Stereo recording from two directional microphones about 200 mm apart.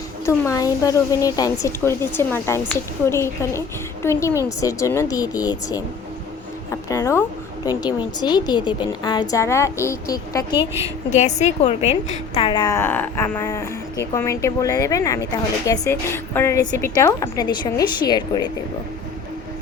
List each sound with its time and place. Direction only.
0.3 s speech: 15° left (ahead or behind)
11.1 s a woman's voice: 35° left (ahead or behind)